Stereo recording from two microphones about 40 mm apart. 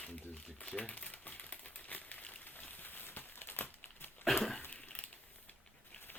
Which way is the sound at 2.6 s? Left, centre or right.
Left.